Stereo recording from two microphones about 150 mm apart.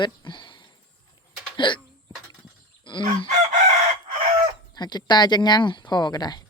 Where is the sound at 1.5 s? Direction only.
30° left (ahead or behind).